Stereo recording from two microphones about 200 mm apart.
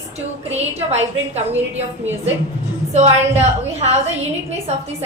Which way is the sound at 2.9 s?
35° right (ahead or behind).